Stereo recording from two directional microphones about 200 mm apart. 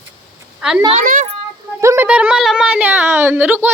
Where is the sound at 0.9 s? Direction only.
40° right (ahead or behind).